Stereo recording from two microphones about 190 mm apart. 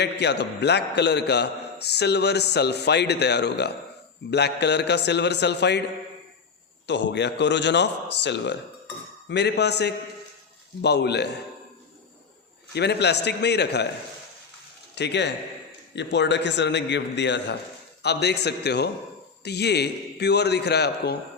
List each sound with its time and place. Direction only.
0.0 s a man's voice: 65° left (ahead or behind)
6.8 s a man's voice: 65° left (ahead or behind)
12.7 s a man's voice: 60° left (ahead or behind)
14.9 s a man's voice: 65° left (ahead or behind)